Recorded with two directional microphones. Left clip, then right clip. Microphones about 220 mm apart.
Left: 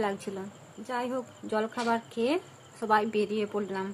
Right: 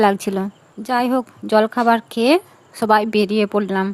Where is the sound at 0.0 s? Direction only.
50° right (ahead or behind).